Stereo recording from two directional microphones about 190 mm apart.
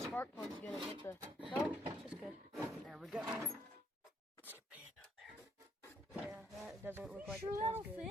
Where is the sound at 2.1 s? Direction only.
Centre (ahead or behind).